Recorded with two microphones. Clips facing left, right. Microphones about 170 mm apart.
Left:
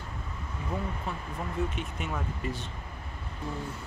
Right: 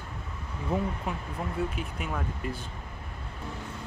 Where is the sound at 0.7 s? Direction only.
25° right (ahead or behind).